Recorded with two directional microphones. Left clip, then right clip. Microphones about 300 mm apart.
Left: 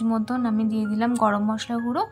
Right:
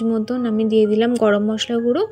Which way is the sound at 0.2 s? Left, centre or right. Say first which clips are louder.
Right 4 dB; centre.